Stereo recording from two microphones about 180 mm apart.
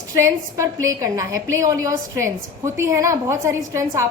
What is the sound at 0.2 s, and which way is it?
A woman's voice, 15° right (ahead or behind).